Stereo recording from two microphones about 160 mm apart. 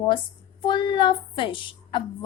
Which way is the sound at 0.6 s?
30° left (ahead or behind).